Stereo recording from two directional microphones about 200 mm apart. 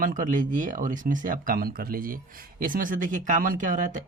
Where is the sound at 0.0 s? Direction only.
40° right (ahead or behind).